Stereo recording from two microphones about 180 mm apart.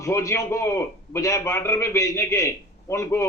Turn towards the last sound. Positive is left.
turn(degrees=15)  # may be behind; listen again after turning